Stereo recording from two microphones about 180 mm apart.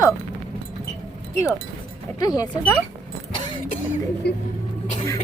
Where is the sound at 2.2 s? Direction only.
20° left (ahead or behind).